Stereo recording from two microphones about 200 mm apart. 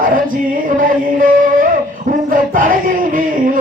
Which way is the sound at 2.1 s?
40° right (ahead or behind).